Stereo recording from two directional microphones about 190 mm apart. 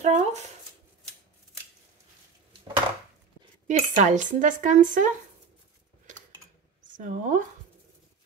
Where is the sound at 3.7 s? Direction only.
35° right (ahead or behind).